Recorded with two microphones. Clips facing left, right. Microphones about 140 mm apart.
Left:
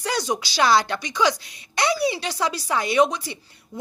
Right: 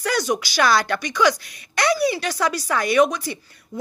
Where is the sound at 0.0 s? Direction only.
25° left (ahead or behind).